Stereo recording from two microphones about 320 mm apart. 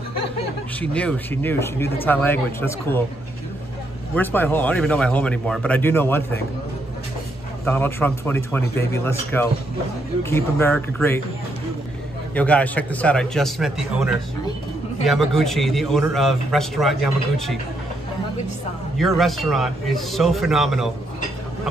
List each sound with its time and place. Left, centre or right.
0.7 s a man's voice: centre
4.1 s a man's voice: centre
7.6 s speech: centre
12.4 s a man's voice: centre
18.9 s a man's voice: centre